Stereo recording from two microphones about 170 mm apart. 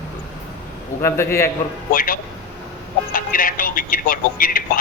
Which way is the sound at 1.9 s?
55° left (ahead or behind).